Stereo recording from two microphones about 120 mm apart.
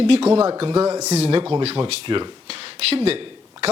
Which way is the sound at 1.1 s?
50° right (ahead or behind).